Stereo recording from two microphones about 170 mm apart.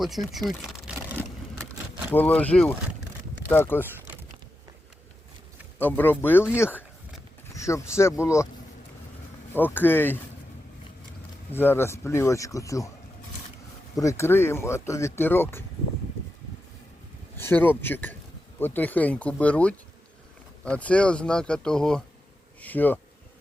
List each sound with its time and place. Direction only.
0.0 s a sound: centre (ahead or behind)
2.1 s speech: 10° left (ahead or behind)
5.8 s speech: 10° left (ahead or behind)
9.5 s speech: 10° left (ahead or behind)
11.5 s speech: 15° left (ahead or behind)
13.9 s speech: 20° left (ahead or behind)
17.3 s speech: 10° left (ahead or behind)